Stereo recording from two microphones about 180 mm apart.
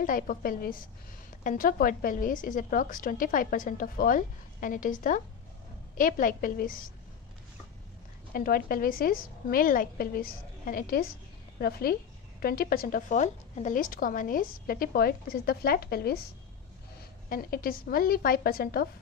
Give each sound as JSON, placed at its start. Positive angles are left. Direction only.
{"t": 0.0, "sound": "a woman's voice", "side_deg": 50}
{"t": 8.3, "sound": "a woman's voice", "side_deg": 55}
{"t": 17.3, "sound": "a woman's voice", "side_deg": 55}